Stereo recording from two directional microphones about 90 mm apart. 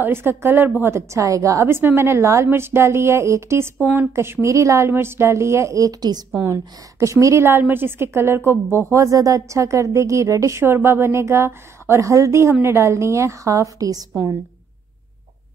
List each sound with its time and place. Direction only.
0.0 s a woman's voice: 25° right (ahead or behind)
0.9 s a woman's voice: 35° right (ahead or behind)
6.3 s a woman's voice: 30° right (ahead or behind)